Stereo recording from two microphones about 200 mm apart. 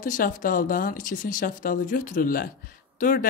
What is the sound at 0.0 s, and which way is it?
Speech, 40° left (ahead or behind).